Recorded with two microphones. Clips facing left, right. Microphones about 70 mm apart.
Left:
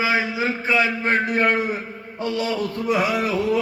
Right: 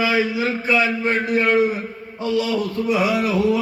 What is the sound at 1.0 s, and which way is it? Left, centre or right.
A man's voice, left.